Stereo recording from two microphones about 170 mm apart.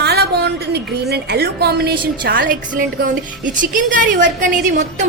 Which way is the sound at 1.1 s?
75° right (ahead or behind).